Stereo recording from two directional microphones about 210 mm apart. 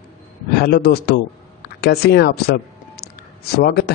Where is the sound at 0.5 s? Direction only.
50° left (ahead or behind).